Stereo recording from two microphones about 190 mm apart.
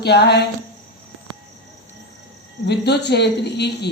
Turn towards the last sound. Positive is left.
turn(degrees=60)  # may be behind; listen again after turning